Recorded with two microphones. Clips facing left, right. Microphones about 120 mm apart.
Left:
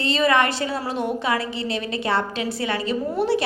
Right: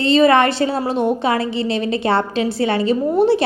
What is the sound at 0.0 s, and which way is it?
A woman's voice, 25° right (ahead or behind).